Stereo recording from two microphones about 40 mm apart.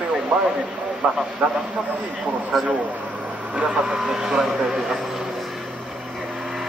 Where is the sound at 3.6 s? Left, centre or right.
Right.